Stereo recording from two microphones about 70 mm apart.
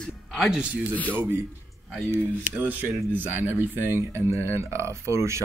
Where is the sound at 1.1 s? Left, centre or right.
Right.